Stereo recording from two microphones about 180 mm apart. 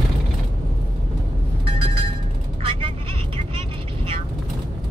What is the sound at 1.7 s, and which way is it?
Music, 30° right (ahead or behind).